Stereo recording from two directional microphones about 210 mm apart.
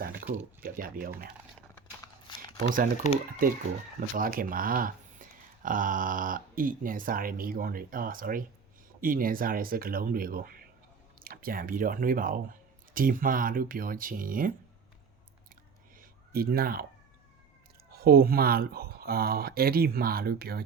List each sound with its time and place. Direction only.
0.0 s a sound: 45° right (ahead or behind)
0.6 s speech: 45° right (ahead or behind)
2.2 s shuffling cards: 20° left (ahead or behind)
3.4 s speech: 45° right (ahead or behind)
16.0 s a sound: 45° right (ahead or behind)
17.9 s speech: 45° right (ahead or behind)